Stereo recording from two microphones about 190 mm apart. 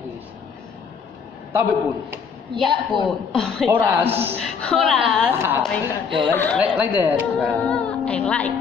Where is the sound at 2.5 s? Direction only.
25° right (ahead or behind).